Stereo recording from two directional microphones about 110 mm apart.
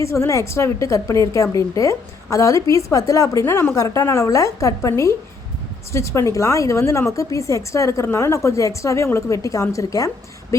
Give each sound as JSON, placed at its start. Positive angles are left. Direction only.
{"t": 0.0, "sound": "a woman's voice", "side_deg": 25}